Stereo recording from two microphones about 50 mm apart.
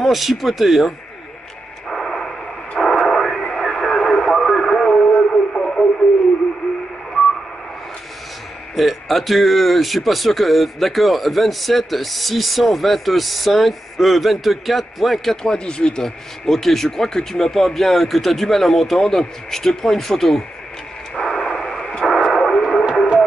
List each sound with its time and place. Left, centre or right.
0.0 s a man's voice: centre
1.9 s a sound: centre
2.8 s radio: centre
8.7 s a man's voice: centre
15.4 s speech: centre
21.2 s radio: centre